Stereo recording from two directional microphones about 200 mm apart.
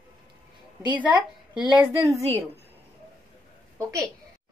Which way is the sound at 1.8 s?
15° right (ahead or behind).